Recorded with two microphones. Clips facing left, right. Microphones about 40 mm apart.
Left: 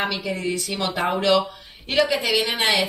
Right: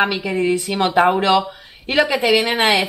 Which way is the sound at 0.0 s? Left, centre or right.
Right.